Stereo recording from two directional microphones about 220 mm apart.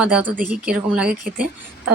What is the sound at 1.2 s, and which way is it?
Speech, 40° right (ahead or behind).